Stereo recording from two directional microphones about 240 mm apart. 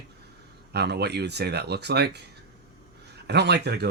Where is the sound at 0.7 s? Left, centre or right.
Right.